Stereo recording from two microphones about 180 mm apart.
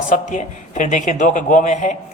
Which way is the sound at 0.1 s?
45° left (ahead or behind).